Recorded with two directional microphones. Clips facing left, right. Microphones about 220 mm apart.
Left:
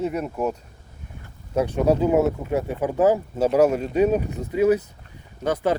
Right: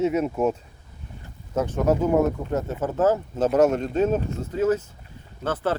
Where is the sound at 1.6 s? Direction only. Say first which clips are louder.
Left 2 dB; 15° left (ahead or behind).